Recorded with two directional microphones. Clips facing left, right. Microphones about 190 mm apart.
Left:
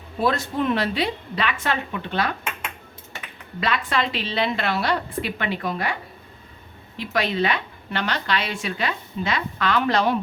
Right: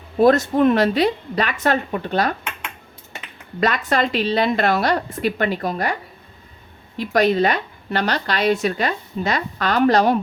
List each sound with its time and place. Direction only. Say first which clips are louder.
0.2 s a woman's voice: right 9 dB; 45° right (ahead or behind)
3.6 s a woman's voice: right 5 dB; 45° right (ahead or behind)